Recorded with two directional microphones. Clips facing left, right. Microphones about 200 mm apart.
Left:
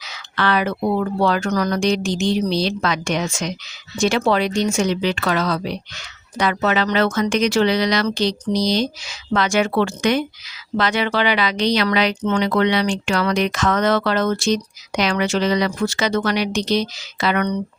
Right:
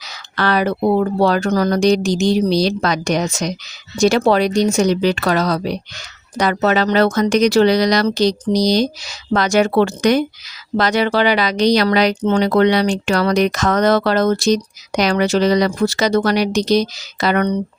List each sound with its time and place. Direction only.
0.0 s speech: 40° right (ahead or behind)